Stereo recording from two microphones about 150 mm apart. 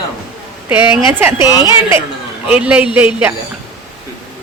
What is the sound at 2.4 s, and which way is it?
Speech, 10° right (ahead or behind).